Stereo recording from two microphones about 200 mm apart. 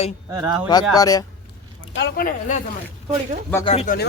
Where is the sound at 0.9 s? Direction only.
20° left (ahead or behind).